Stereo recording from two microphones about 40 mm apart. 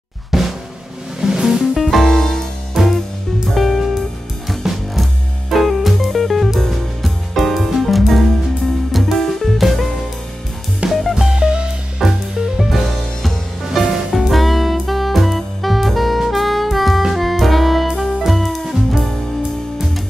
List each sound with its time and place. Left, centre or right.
0.3 s drum: centre
1.2 s music: centre
1.8 s music: centre
2.8 s music: centre
10.9 s music: centre
11.3 s music: right
12.0 s music: centre
14.2 s saxophone: centre
17.1 s music: centre